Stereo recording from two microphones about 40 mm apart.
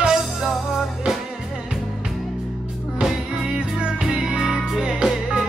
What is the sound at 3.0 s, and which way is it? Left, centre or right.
Music, centre.